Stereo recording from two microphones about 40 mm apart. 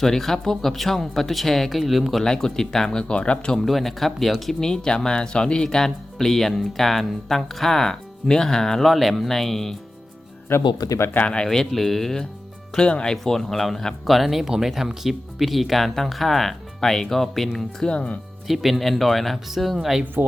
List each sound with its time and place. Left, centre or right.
0.0 s speech: centre
2.3 s speech: centre
3.0 s speech: left
3.5 s speech: centre
4.6 s speech: centre
8.9 s speech: centre
10.5 s speech: left
11.4 s speech: centre
12.7 s speech: centre
17.8 s speech: left
18.4 s speech: centre